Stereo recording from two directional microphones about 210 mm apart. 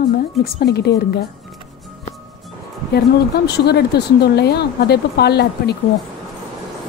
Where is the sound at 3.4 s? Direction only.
50° left (ahead or behind).